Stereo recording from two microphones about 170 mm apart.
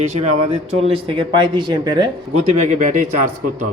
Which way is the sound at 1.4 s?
25° right (ahead or behind).